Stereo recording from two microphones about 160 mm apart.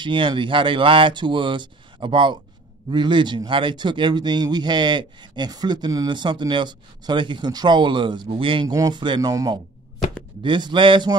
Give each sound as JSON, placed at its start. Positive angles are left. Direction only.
{"t": 0.0, "sound": "speech", "side_deg": -30}